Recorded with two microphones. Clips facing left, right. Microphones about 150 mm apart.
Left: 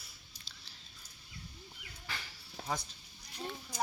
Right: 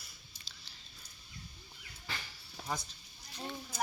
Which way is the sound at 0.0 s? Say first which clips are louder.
Even; centre (ahead or behind).